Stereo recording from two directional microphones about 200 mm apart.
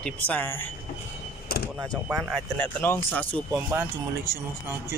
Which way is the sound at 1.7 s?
Centre (ahead or behind).